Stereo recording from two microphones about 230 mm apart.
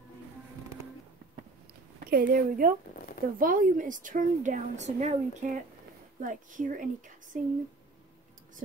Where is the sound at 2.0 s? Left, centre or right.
Right.